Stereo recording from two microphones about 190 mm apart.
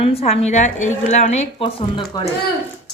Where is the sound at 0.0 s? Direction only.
30° left (ahead or behind).